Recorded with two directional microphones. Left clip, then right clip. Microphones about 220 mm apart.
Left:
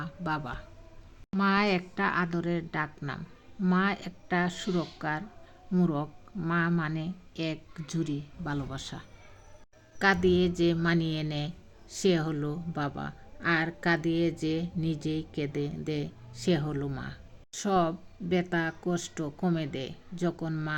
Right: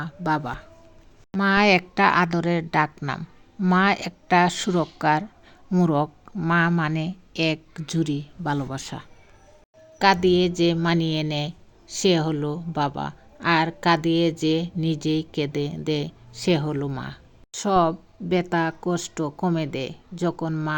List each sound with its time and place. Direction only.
0.0 s a woman's voice: 30° right (ahead or behind)